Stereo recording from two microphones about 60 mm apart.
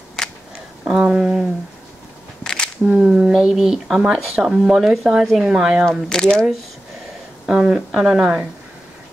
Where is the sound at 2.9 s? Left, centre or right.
Centre.